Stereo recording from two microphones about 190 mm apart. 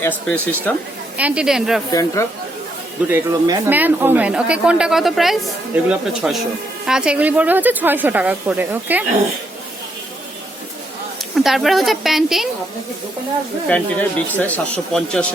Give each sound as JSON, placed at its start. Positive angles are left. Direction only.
{"t": 0.3, "sound": "a man's voice", "side_deg": 10}
{"t": 1.1, "sound": "speech", "side_deg": -5}
{"t": 1.9, "sound": "a man's voice", "side_deg": 15}
{"t": 3.1, "sound": "a woman's voice", "side_deg": -15}
{"t": 11.3, "sound": "speech", "side_deg": 0}
{"t": 13.7, "sound": "a man's voice", "side_deg": 5}